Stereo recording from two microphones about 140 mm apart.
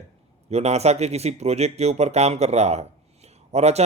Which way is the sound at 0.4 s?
50° right (ahead or behind).